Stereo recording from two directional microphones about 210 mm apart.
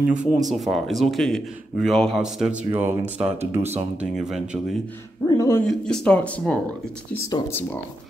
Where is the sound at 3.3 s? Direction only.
30° right (ahead or behind).